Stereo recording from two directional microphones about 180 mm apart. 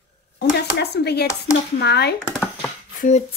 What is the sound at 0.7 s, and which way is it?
Speech, 65° left (ahead or behind).